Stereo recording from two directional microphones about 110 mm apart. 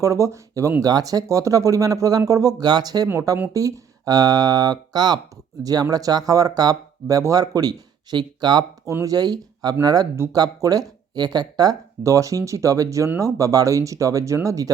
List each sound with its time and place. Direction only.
0.0 s speech: 30° right (ahead or behind)
3.1 s speech: 25° right (ahead or behind); by 8.6 s 40° right (ahead or behind)
8.9 s speech: 25° right (ahead or behind)
9.1 s speech: 35° right (ahead or behind)